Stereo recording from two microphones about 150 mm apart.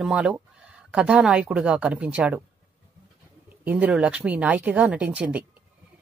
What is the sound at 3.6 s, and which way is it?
Speech, 10° right (ahead or behind).